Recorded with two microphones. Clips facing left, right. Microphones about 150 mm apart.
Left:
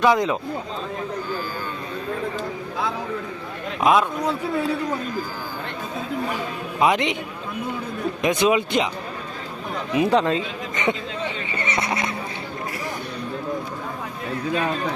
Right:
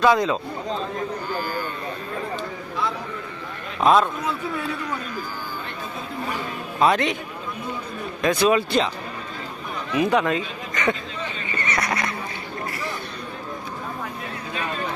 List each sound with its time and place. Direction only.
0.0 s speech: 20° left (ahead or behind)
3.8 s a man's voice: 10° left (ahead or behind)
6.7 s a man's voice: 15° left (ahead or behind)
8.2 s speech: 20° left (ahead or behind)
9.9 s speech: 30° left (ahead or behind)
11.5 s vehicle: 25° left (ahead or behind)